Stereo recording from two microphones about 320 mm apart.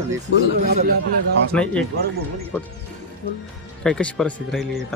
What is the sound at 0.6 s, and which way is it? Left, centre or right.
Speech, right.